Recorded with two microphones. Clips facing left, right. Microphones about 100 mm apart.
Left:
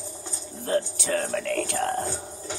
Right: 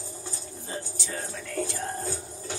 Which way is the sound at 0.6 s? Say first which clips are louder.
Left 12 dB; 65° left (ahead or behind).